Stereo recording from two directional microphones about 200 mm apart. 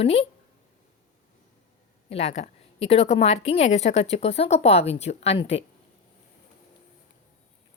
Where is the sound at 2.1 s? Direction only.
35° left (ahead or behind).